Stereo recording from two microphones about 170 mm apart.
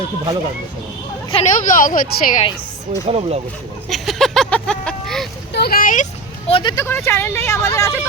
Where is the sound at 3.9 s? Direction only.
Centre (ahead or behind).